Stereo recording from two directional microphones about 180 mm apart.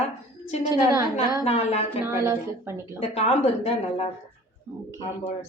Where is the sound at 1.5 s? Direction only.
35° left (ahead or behind).